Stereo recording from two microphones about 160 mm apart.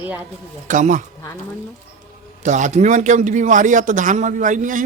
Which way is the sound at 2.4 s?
50° right (ahead or behind).